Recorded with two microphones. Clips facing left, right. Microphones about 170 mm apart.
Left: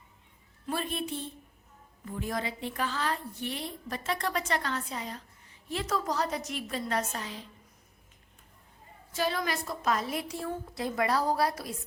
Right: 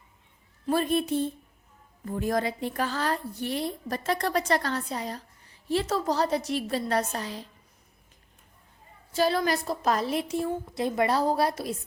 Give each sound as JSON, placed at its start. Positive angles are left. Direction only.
{"t": 0.7, "sound": "a woman's voice", "side_deg": -40}
{"t": 9.1, "sound": "a woman's voice", "side_deg": -35}